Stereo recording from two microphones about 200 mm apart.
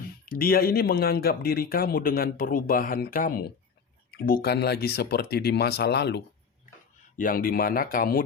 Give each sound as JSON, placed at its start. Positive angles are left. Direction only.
{"t": 0.3, "sound": "speech", "side_deg": 45}
{"t": 7.2, "sound": "speech", "side_deg": 45}